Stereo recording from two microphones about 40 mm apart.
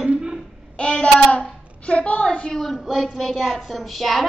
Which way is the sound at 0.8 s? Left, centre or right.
Left.